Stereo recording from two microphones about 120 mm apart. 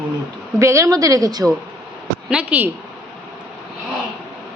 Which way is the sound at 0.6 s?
25° right (ahead or behind).